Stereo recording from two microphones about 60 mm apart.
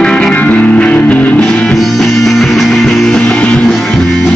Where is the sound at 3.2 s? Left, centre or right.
Centre.